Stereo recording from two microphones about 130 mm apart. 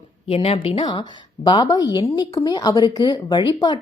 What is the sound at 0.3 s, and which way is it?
A woman's voice, 50° left (ahead or behind).